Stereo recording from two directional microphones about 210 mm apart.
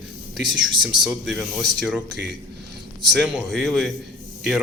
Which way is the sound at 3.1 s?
Centre (ahead or behind).